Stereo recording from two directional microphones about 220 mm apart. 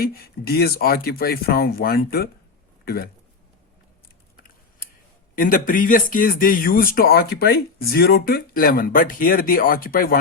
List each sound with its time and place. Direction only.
0.0 s speech: 45° left (ahead or behind)
5.3 s speech: 40° left (ahead or behind)